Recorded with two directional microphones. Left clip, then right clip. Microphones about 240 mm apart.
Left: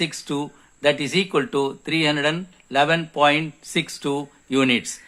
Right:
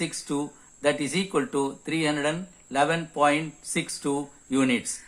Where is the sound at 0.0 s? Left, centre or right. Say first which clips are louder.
Left 4 dB; left.